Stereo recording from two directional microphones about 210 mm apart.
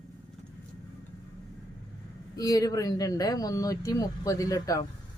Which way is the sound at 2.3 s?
15° left (ahead or behind).